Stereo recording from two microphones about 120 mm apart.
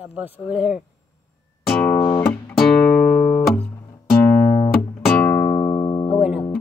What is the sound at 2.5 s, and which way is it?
Music, 5° left (ahead or behind).